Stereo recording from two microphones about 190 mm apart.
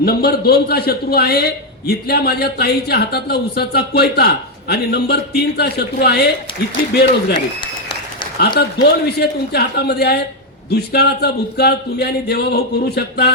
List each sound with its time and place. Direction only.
0.0 s speech: 55° left (ahead or behind)
8.5 s speech: 60° left (ahead or behind)